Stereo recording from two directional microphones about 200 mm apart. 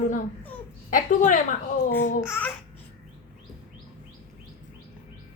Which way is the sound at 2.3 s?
10° left (ahead or behind).